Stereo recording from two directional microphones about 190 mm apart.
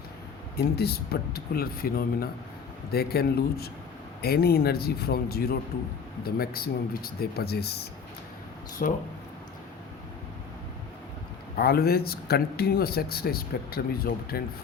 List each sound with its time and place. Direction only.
0.5 s speech: 55° left (ahead or behind)
8.8 s speech: 40° left (ahead or behind)
11.5 s speech: 55° left (ahead or behind)